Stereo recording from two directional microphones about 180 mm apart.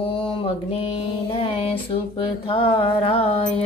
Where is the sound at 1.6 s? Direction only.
30° left (ahead or behind).